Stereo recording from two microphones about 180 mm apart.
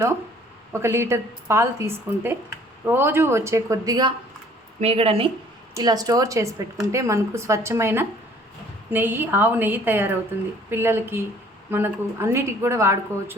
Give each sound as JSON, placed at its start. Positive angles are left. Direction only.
{"t": 0.7, "sound": "a woman's voice", "side_deg": -15}
{"t": 4.8, "sound": "speech", "side_deg": -35}
{"t": 5.7, "sound": "a woman's voice", "side_deg": -20}